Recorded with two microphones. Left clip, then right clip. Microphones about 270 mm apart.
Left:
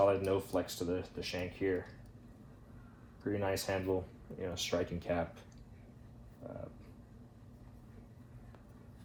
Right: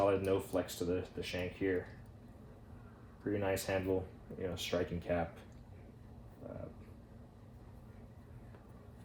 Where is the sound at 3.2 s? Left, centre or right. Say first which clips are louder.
Even; centre.